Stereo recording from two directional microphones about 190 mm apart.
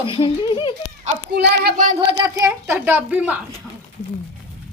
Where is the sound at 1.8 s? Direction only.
40° right (ahead or behind).